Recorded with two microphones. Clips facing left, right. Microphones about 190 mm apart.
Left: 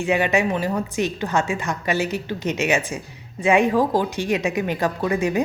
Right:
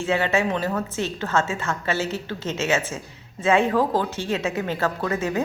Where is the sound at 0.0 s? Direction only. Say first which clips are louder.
Left 2 dB; 15° left (ahead or behind).